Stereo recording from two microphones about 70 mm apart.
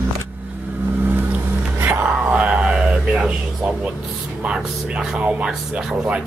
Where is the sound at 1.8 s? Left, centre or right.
Right.